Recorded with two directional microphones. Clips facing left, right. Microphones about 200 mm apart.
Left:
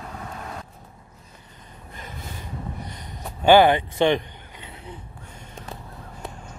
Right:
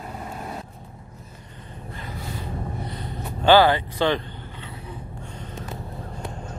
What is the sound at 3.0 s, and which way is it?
Vehicle, 15° left (ahead or behind).